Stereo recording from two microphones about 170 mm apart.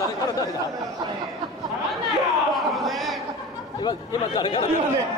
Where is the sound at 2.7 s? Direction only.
Centre (ahead or behind).